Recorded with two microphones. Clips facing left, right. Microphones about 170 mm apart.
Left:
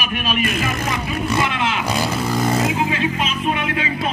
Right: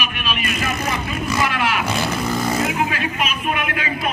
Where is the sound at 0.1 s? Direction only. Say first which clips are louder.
Left 4 dB; 45° left (ahead or behind).